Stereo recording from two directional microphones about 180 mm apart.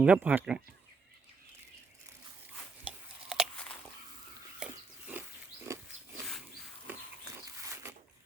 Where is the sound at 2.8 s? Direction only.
5° right (ahead or behind).